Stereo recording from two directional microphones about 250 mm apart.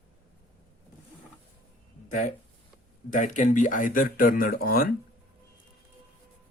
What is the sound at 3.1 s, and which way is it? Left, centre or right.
Speech, left.